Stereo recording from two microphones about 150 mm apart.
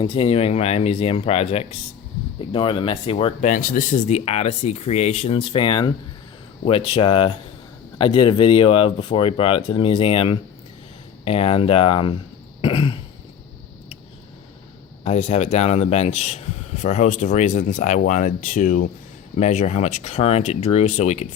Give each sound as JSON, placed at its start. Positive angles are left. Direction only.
{"t": 0.0, "sound": "speech", "side_deg": 40}
{"t": 3.4, "sound": "speech", "side_deg": 60}
{"t": 15.0, "sound": "speech", "side_deg": 45}
{"t": 19.4, "sound": "speech", "side_deg": 50}